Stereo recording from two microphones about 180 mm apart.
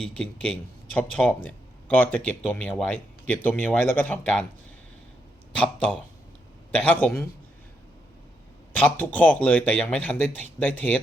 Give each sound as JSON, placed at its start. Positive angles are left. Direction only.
{"t": 0.9, "sound": "speech", "side_deg": 10}
{"t": 5.5, "sound": "speech", "side_deg": 5}
{"t": 8.7, "sound": "speech", "side_deg": 10}